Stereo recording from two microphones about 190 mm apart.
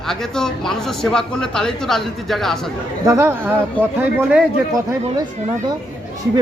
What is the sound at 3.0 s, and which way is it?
Speech, 15° right (ahead or behind).